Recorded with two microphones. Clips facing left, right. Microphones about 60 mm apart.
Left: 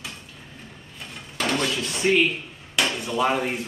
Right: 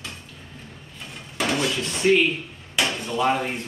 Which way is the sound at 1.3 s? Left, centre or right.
Centre.